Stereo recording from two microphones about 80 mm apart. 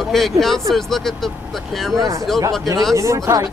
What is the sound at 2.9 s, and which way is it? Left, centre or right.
Speech, right.